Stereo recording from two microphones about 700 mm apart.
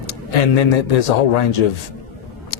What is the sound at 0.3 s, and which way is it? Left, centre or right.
Speech, left.